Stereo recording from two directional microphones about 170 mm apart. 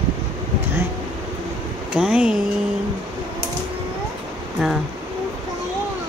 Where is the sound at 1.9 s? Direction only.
5° right (ahead or behind).